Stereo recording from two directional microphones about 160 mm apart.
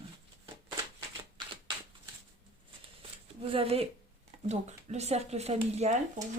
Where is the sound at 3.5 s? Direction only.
35° right (ahead or behind).